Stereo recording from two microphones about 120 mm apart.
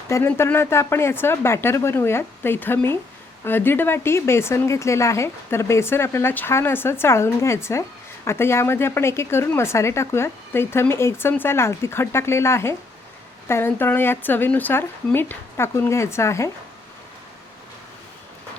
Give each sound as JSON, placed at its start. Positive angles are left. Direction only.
{"t": 0.1, "sound": "speech", "side_deg": 20}